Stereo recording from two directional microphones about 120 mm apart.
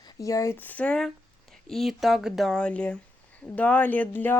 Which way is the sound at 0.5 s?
15° left (ahead or behind).